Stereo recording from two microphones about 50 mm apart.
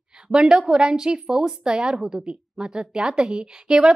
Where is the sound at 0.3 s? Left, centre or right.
Centre.